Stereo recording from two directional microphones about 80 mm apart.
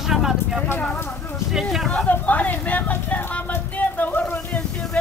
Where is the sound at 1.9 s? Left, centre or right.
Centre.